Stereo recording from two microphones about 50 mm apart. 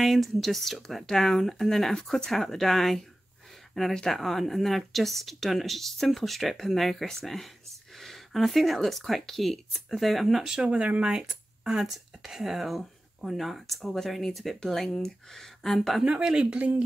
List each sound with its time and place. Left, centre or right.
0.0 s speech: centre
16.0 s speech: centre